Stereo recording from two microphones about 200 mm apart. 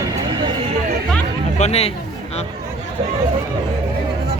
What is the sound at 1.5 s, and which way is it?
Speech, 35° left (ahead or behind).